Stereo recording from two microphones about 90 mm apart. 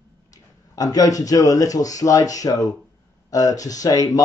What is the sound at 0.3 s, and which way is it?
Speech, 45° left (ahead or behind).